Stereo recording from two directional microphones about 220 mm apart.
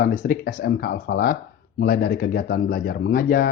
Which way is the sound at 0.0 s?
40° left (ahead or behind).